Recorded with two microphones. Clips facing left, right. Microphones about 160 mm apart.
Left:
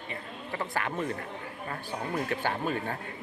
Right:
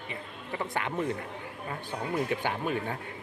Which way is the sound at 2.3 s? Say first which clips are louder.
Even; 15° right (ahead or behind).